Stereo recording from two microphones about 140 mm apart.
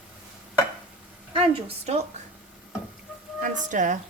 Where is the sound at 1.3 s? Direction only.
45° right (ahead or behind).